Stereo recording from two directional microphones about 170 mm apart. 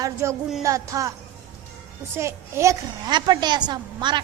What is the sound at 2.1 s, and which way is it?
A child's voice, 15° right (ahead or behind).